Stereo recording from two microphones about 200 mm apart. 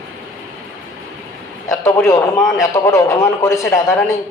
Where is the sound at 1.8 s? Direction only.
15° left (ahead or behind).